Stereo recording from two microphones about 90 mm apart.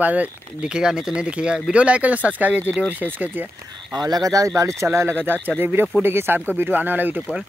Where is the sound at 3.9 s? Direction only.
50° right (ahead or behind).